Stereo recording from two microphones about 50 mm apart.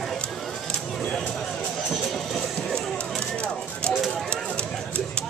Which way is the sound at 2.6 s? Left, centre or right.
Centre.